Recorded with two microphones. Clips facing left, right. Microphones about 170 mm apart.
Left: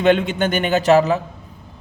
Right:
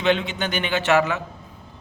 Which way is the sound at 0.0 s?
50° left (ahead or behind).